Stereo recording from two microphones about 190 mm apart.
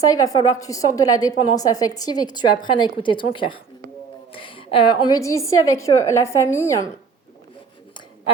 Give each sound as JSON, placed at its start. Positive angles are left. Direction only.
{"t": 0.1, "sound": "a woman's voice", "side_deg": 20}